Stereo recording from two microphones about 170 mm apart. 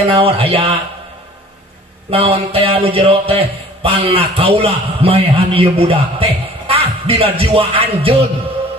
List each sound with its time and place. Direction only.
0.0 s a man's voice: 35° right (ahead or behind)
2.0 s a man's voice: 35° right (ahead or behind)